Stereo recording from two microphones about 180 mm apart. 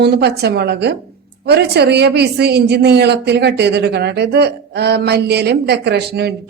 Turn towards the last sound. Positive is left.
turn(degrees=-65)  # may be behind; listen again after turning